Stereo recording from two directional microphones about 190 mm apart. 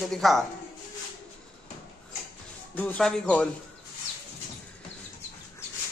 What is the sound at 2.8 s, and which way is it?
Speech, 5° left (ahead or behind).